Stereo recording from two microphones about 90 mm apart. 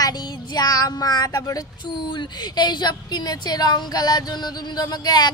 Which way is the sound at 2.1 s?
55° left (ahead or behind).